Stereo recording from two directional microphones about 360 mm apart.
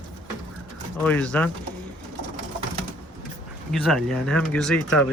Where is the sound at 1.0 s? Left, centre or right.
Centre.